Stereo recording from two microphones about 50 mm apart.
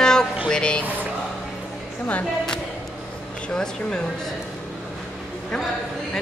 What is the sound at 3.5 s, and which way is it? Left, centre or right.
Speech, centre.